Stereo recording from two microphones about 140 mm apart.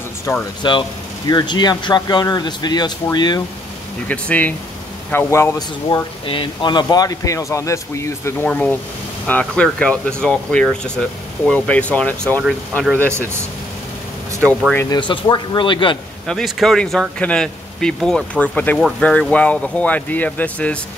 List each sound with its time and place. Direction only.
0.6 s speech: 35° left (ahead or behind)
4.1 s speech: 10° left (ahead or behind)
5.9 s speech: 40° left (ahead or behind); by 8.5 s 20° left (ahead or behind)
8.5 s speech: 10° left (ahead or behind)
14.9 s speech: 30° left (ahead or behind)
16.3 s speech: centre (ahead or behind)